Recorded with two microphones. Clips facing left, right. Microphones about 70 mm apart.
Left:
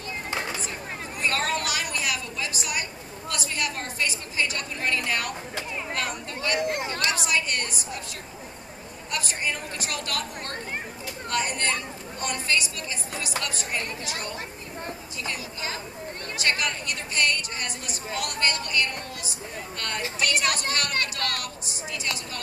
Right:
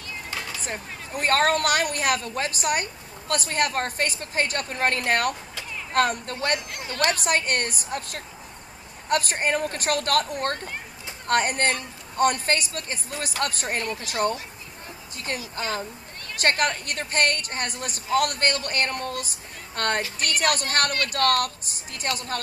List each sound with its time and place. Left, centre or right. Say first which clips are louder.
0.3 s a sound: left 4 dB; left
0.7 s a woman's voice: right 1 dB; right
6.6 s speech: left 8 dB; left
7.1 s a woman's voice: right 4 dB; right
15.5 s a woman's voice: right 4 dB; right